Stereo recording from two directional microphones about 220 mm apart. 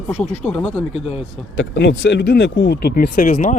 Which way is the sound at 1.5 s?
55° left (ahead or behind).